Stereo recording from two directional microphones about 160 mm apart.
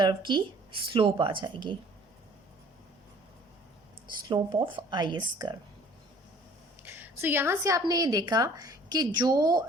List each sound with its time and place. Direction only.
0.0 s a woman's voice: 25° right (ahead or behind)
4.3 s a woman's voice: 30° right (ahead or behind)
6.8 s a woman's voice: 15° right (ahead or behind)